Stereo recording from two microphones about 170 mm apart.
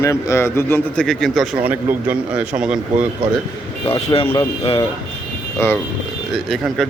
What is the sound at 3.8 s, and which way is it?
Speech, 35° left (ahead or behind).